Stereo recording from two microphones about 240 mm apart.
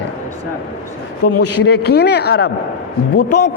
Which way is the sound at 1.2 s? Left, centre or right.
Left.